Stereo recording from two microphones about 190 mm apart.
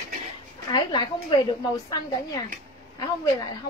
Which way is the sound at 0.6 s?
20° left (ahead or behind).